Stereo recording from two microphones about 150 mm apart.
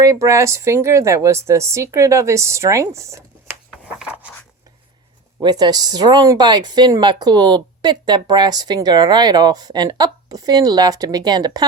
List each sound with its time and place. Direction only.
0.0 s speech: 20° right (ahead or behind)
3.8 s a sound: 10° right (ahead or behind)
5.4 s speech: 30° right (ahead or behind)